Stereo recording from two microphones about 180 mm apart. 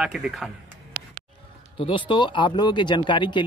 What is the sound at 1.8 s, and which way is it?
Speech, 30° left (ahead or behind).